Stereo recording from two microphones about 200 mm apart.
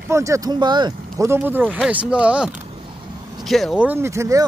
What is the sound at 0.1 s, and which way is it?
Speech, 15° right (ahead or behind).